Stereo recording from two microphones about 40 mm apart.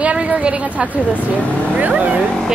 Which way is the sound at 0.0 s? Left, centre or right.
Right.